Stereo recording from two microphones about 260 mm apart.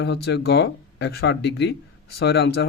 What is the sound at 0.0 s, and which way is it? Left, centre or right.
Speech, left.